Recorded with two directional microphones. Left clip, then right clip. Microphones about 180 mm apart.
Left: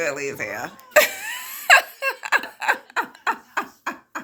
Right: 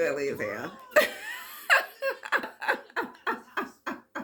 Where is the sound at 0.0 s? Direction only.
20° left (ahead or behind).